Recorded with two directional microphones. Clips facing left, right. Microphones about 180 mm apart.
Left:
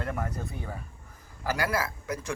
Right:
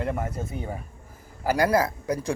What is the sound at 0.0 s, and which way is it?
Speech, 20° right (ahead or behind).